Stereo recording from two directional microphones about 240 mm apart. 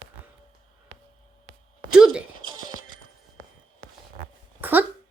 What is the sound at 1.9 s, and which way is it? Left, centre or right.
Speech, centre.